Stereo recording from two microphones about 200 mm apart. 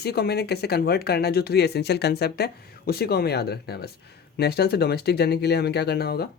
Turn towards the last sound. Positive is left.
turn(degrees=50)  # may be behind; listen again after turning